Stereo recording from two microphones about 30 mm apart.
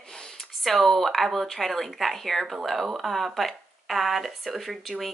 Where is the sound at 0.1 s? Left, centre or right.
Left.